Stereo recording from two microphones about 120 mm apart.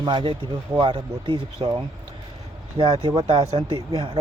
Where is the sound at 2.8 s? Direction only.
35° right (ahead or behind).